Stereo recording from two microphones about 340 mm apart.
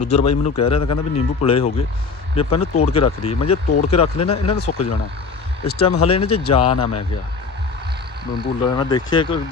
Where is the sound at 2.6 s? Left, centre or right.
Left.